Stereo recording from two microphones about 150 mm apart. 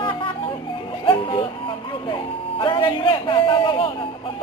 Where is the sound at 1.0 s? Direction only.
35° left (ahead or behind).